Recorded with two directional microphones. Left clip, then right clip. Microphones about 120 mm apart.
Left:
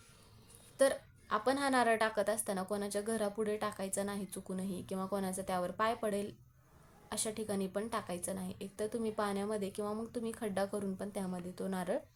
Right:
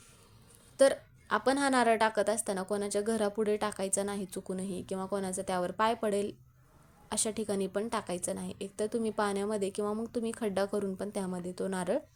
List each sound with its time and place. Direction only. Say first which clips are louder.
0.8 s a woman's voice: right 6 dB; 40° right (ahead or behind)